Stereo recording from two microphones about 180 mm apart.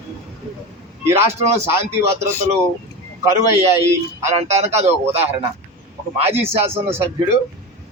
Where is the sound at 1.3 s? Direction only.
35° right (ahead or behind).